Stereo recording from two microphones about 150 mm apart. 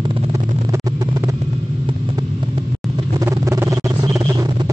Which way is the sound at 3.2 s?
20° right (ahead or behind).